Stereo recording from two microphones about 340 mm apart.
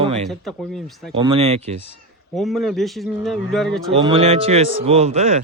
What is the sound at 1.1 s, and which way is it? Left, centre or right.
Speech, centre.